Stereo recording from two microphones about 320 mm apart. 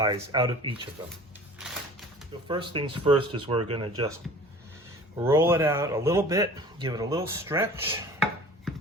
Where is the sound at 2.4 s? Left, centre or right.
Centre.